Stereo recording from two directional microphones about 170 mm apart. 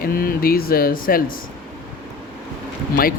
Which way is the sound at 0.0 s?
60° left (ahead or behind).